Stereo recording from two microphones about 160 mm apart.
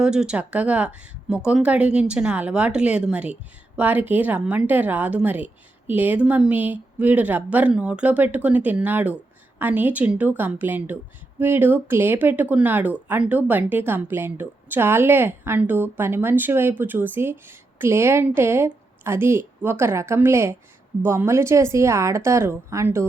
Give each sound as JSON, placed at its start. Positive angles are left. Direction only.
{"t": 0.0, "sound": "a woman's voice", "side_deg": -5}